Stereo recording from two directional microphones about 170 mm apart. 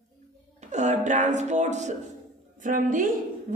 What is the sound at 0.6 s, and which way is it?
Speech, 45° right (ahead or behind).